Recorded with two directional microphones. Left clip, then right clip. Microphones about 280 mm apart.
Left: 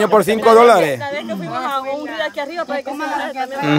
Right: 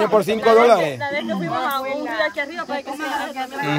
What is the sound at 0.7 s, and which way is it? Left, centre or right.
Speech, centre.